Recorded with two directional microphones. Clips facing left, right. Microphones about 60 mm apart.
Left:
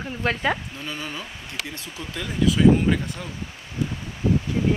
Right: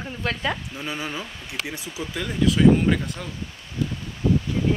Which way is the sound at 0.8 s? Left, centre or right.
Centre.